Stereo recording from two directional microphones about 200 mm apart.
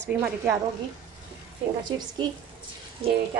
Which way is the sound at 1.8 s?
20° right (ahead or behind).